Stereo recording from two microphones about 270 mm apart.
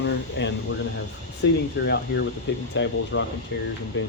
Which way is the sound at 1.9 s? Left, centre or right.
Left.